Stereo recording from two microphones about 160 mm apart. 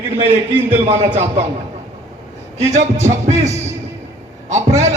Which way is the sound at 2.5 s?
45° right (ahead or behind).